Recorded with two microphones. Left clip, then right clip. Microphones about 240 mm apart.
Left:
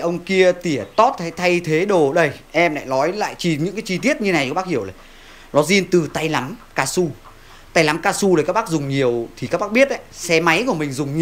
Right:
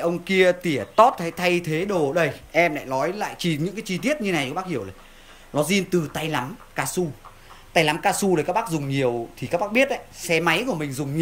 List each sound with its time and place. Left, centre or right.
0.0 s speech: centre